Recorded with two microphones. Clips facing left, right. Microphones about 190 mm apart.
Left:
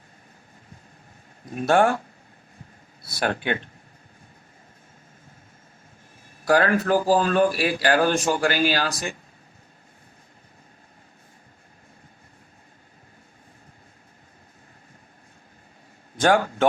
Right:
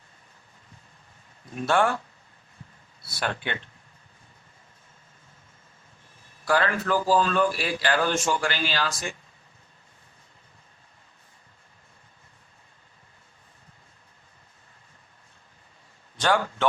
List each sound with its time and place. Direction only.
1.5 s speech: 45° left (ahead or behind)
6.4 s speech: 45° left (ahead or behind)
16.1 s a man's voice: 50° left (ahead or behind)